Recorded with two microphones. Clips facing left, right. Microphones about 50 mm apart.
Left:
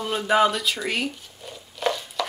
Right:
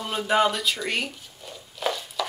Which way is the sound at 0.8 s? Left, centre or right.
Centre.